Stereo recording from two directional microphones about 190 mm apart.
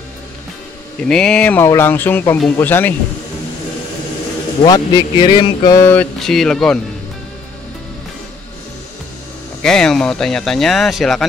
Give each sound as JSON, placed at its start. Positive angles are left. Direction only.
{"t": 1.0, "sound": "speech", "side_deg": 5}
{"t": 4.6, "sound": "a sound", "side_deg": 20}
{"t": 5.8, "sound": "speech", "side_deg": 10}
{"t": 9.6, "sound": "speech", "side_deg": 5}